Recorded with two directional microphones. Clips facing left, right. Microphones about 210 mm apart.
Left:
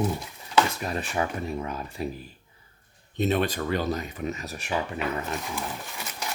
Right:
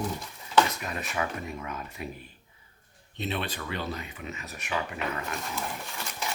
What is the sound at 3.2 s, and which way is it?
Speech, 45° left (ahead or behind).